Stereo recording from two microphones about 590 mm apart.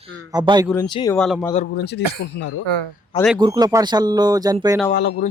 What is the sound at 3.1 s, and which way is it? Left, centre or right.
Speech, centre.